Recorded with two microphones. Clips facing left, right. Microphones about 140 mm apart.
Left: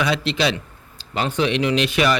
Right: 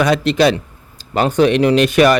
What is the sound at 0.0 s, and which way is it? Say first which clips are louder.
Speech: right 8 dB; 45° right (ahead or behind).